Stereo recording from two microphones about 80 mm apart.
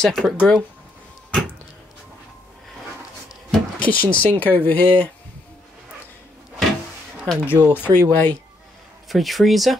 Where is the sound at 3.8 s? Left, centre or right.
Centre.